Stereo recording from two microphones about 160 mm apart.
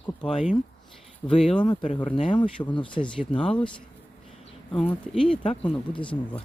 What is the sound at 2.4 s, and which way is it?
Speech, 10° left (ahead or behind).